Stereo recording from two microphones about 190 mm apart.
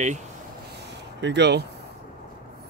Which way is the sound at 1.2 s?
65° right (ahead or behind).